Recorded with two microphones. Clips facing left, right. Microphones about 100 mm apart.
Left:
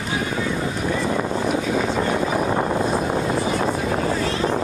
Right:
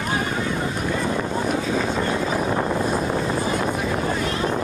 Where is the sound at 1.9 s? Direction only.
25° left (ahead or behind).